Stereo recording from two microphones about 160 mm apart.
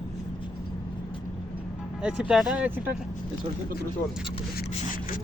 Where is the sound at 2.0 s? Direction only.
5° right (ahead or behind).